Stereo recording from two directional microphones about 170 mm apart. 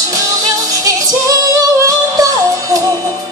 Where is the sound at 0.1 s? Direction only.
20° right (ahead or behind).